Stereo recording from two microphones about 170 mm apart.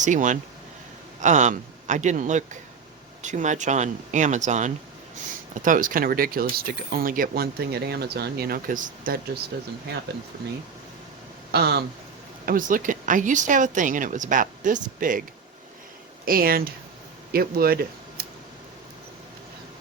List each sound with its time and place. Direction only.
0.0 s speech: 50° right (ahead or behind)
11.5 s a sound: 70° right (ahead or behind)
12.5 s speech: 55° right (ahead or behind)
16.2 s speech: 60° right (ahead or behind)